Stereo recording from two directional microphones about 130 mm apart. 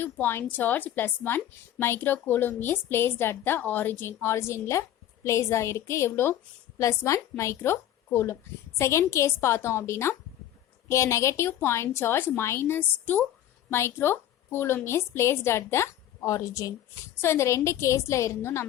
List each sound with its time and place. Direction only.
0.0 s a woman's voice: 15° left (ahead or behind)